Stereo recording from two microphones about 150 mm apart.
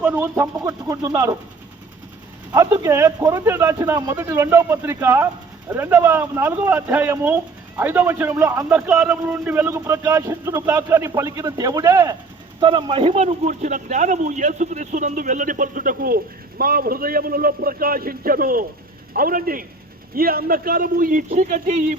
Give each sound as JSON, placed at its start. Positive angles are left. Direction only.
{"t": 0.0, "sound": "speech", "side_deg": -15}
{"t": 2.5, "sound": "speech", "side_deg": -20}
{"t": 12.5, "sound": "speech", "side_deg": -35}